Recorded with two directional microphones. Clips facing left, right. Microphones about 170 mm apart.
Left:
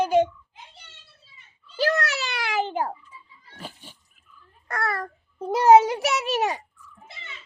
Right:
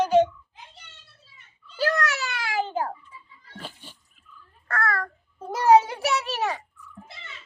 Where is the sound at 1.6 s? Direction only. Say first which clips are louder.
Left 1 dB; 25° left (ahead or behind).